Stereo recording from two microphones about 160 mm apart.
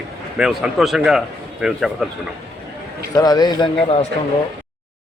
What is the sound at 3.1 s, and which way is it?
Speech, 25° left (ahead or behind).